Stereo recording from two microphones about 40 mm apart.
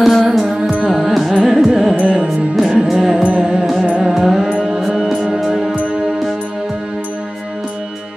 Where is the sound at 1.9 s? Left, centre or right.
Right.